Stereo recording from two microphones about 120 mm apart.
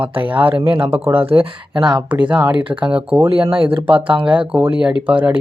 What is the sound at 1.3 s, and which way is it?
Speech, 45° right (ahead or behind).